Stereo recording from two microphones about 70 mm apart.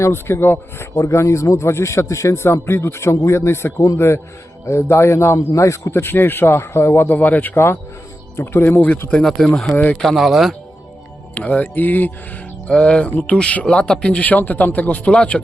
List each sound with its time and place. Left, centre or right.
0.0 s speech: left
5.9 s a man's voice: left
9.2 s speech: centre
9.7 s a man's voice: left
10.0 s speech: centre
11.3 s speech: left
12.7 s music: centre
13.3 s a man's voice: centre